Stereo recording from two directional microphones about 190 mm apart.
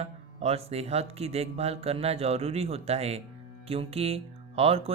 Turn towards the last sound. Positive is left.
turn(degrees=-30)  # may be behind; listen again after turning